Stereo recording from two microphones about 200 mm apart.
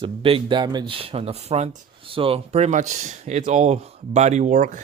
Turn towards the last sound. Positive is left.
turn(degrees=-40)  # may be behind; listen again after turning